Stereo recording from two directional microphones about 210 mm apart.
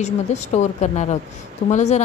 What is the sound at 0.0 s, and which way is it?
A woman's voice, 35° left (ahead or behind).